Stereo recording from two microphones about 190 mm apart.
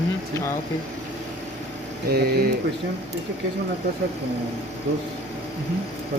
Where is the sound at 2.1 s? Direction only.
55° right (ahead or behind).